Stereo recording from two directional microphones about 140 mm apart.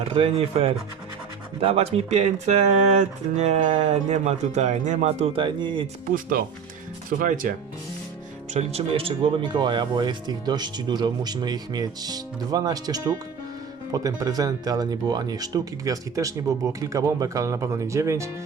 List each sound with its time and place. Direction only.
0.0 s speech: 40° right (ahead or behind)
6.1 s speech: 80° right
8.5 s speech: 45° right (ahead or behind); by 13.1 s 30° right (ahead or behind)
14.2 s speech: 25° right (ahead or behind)